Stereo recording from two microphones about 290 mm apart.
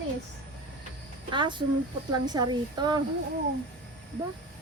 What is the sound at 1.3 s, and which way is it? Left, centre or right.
Speech, centre.